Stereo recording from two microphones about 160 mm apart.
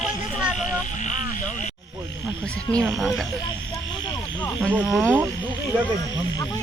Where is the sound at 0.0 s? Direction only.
5° right (ahead or behind).